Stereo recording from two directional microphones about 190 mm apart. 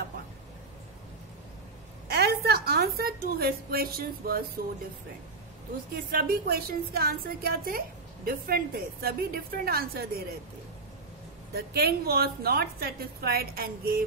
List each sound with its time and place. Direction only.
2.0 s a woman's voice: 60° right (ahead or behind)
6.1 s a woman's voice: 50° right (ahead or behind)
11.5 s a woman's voice: 55° right (ahead or behind)